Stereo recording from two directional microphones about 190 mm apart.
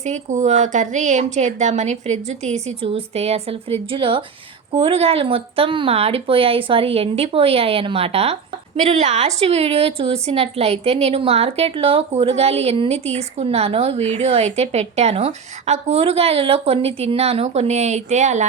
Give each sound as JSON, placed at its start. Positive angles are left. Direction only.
{"t": 0.0, "sound": "speech", "side_deg": -40}